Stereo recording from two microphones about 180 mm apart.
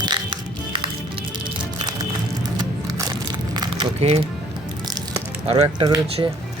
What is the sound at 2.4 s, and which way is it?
Crumpling, 20° right (ahead or behind).